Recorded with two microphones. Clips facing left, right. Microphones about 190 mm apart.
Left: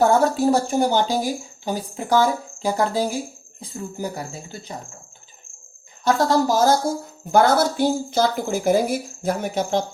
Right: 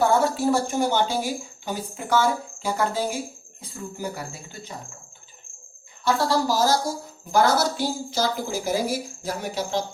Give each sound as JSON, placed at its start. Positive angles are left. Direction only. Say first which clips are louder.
{"t": 0.0, "sound": "speech", "louder": "left 3 dB", "side_deg": 40}
{"t": 6.1, "sound": "a woman's voice", "louder": "left 4 dB", "side_deg": 45}